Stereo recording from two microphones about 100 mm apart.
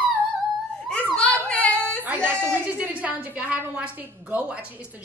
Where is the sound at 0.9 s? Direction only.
10° left (ahead or behind).